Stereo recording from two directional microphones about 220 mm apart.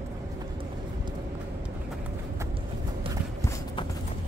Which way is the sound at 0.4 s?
20° right (ahead or behind).